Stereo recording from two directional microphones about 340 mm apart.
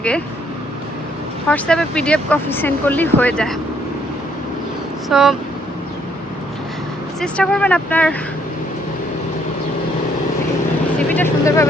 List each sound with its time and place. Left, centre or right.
1.5 s speech: centre
5.0 s speech: centre
7.2 s speech: centre
10.9 s vehicle: centre